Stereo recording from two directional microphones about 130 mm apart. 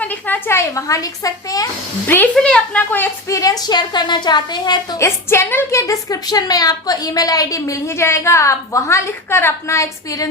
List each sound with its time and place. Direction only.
0.0 s a woman's voice: 15° left (ahead or behind)
2.0 s a woman's voice: 15° left (ahead or behind); by 5.0 s 30° left (ahead or behind)
5.0 s a woman's voice: 20° left (ahead or behind)